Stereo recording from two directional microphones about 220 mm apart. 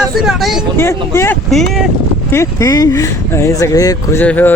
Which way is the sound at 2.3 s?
15° left (ahead or behind).